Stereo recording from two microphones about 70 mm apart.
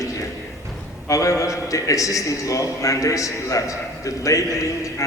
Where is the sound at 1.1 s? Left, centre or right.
Left.